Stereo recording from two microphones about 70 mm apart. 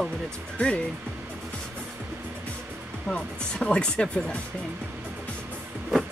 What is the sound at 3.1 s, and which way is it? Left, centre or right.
Speech, centre.